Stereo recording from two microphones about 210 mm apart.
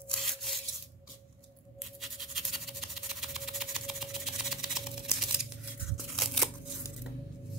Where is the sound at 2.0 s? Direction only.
Centre (ahead or behind).